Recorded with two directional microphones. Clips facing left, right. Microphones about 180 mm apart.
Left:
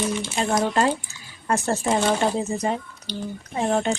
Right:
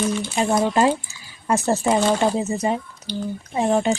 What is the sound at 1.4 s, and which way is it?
A woman's voice, 10° right (ahead or behind).